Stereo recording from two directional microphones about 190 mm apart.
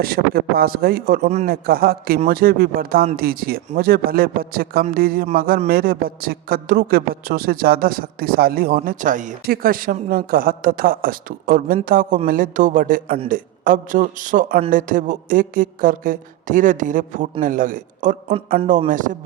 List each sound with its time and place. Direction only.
0.0 s a woman's voice: 50° right (ahead or behind)